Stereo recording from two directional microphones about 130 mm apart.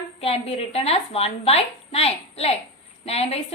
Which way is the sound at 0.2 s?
50° left (ahead or behind).